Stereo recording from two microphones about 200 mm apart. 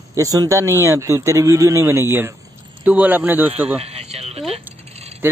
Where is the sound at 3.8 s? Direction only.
30° right (ahead or behind).